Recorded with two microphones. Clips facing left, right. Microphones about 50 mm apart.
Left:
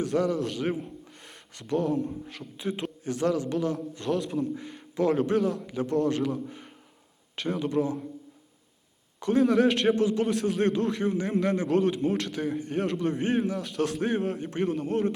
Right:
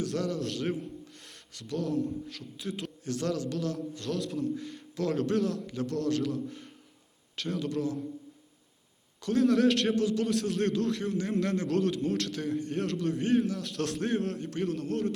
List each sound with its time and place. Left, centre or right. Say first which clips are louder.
0.0 s a man's voice: left 5 dB; centre
1.5 s a man's voice: left 4 dB; left
9.2 s a man's voice: left 2 dB; centre